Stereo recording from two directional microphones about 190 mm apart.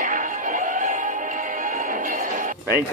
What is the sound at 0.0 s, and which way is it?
Music, 45° right (ahead or behind).